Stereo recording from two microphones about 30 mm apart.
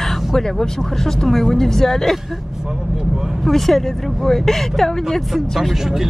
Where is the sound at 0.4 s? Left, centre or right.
Centre.